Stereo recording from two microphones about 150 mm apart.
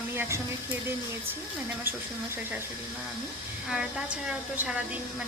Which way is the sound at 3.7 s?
5° right (ahead or behind).